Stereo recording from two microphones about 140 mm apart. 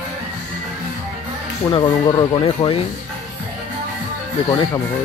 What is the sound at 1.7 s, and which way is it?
Speech, 35° left (ahead or behind).